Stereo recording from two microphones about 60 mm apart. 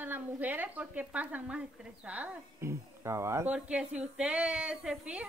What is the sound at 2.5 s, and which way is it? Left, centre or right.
Speech, right.